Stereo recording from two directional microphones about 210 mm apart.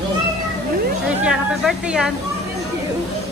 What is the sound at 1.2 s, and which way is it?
Speech, 5° right (ahead or behind).